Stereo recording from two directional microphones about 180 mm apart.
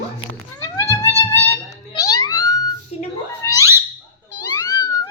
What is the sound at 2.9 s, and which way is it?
Cat, 35° left (ahead or behind).